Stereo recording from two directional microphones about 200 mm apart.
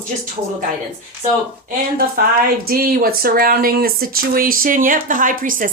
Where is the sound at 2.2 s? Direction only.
50° right (ahead or behind).